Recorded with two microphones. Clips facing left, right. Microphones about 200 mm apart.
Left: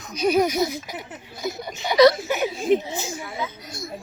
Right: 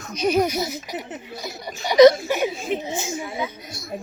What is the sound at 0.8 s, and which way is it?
Speech, 20° right (ahead or behind).